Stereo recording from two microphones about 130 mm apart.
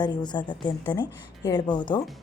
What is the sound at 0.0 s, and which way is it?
A woman's voice, 35° left (ahead or behind).